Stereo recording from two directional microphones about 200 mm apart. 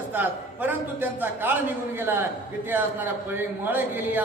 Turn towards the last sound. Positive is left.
turn(degrees=-10)  # may be behind; listen again after turning